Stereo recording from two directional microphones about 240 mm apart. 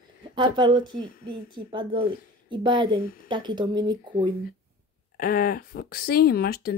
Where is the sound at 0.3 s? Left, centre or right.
Centre.